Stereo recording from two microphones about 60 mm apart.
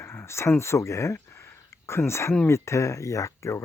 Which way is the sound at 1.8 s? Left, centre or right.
Left.